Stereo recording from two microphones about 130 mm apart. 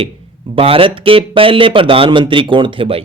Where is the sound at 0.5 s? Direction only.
45° right (ahead or behind).